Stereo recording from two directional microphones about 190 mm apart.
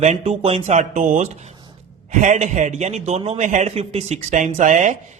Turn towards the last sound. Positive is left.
turn(degrees=-40)  # may be behind; listen again after turning